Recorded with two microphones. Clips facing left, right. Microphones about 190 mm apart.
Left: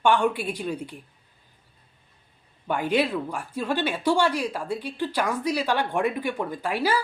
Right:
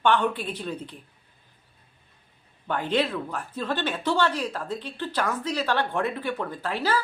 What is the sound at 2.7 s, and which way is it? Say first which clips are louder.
Speech: left 2 dB; 10° left (ahead or behind).